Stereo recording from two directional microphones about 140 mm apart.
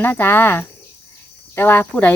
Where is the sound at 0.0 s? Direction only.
15° left (ahead or behind).